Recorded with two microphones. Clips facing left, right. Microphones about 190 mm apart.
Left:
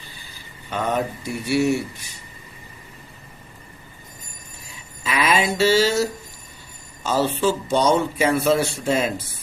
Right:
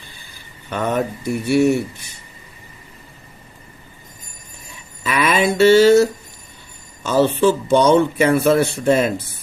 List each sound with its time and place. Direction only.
0.7 s speech: 50° right (ahead or behind)
5.0 s a sound: 55° right (ahead or behind)
7.0 s speech: 60° right (ahead or behind)